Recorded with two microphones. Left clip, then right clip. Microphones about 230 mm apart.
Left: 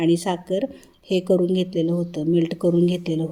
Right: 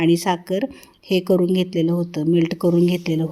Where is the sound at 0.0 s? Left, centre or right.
Right.